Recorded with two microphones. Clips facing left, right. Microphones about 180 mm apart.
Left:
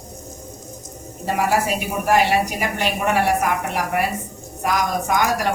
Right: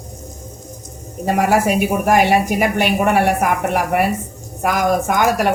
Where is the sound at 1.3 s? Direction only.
55° right (ahead or behind).